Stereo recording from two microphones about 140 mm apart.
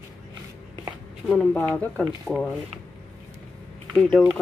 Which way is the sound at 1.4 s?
10° left (ahead or behind).